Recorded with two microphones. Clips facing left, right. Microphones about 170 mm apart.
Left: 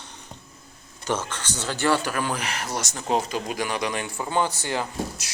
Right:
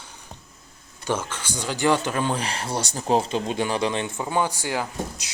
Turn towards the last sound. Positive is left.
turn(degrees=-15)  # may be behind; listen again after turning